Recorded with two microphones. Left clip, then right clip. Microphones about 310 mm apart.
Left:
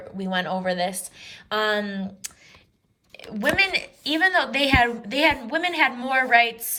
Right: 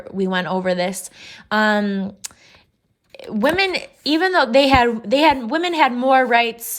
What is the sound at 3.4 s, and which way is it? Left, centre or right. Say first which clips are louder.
A woman's voice: right 3 dB; centre.